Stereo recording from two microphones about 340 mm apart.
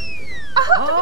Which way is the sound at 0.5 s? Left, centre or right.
Centre.